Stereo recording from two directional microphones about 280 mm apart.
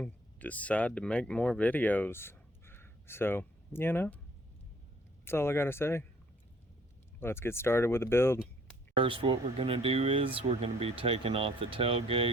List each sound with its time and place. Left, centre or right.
0.0 s speech: centre
5.2 s speech: centre
7.2 s speech: centre
9.0 s speech: centre